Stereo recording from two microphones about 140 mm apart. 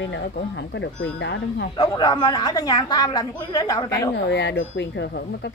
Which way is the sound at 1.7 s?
30° left (ahead or behind).